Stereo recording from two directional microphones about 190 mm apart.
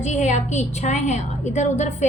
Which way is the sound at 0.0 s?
35° left (ahead or behind).